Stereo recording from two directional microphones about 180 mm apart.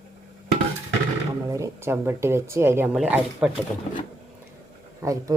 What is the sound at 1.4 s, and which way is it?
Speech, 15° right (ahead or behind).